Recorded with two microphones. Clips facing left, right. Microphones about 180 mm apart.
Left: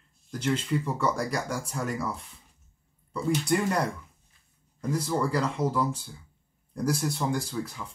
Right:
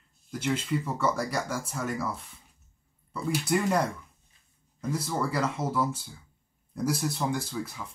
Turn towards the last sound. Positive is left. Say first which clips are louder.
# left 1 dB
turn(degrees=0)  # may be behind; listen again after turning